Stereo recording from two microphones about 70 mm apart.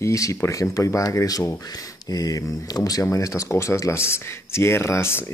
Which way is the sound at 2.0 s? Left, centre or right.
Left.